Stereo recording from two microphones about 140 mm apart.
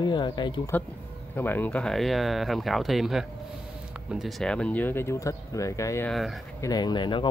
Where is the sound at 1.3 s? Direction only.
15° left (ahead or behind).